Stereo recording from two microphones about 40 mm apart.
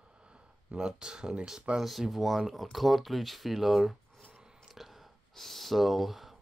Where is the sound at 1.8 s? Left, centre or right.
Centre.